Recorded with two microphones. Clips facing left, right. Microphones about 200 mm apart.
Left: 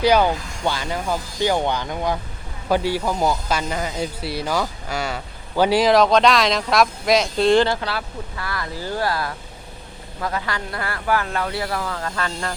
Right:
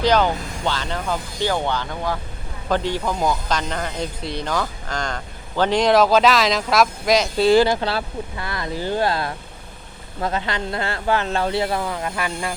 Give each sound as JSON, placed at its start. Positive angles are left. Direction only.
{"t": 0.0, "sound": "speech", "side_deg": 10}
{"t": 7.8, "sound": "speech", "side_deg": -25}